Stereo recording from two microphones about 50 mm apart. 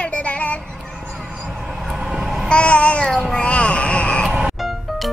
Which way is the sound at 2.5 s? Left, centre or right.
Left.